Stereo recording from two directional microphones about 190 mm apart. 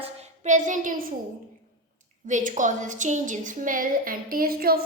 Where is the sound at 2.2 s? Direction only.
40° right (ahead or behind).